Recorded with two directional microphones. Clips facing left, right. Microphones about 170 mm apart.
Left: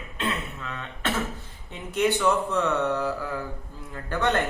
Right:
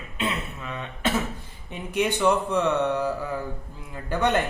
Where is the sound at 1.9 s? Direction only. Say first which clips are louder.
Right 1 dB; 15° right (ahead or behind).